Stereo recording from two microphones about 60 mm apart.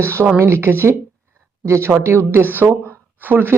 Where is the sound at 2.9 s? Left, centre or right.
Right.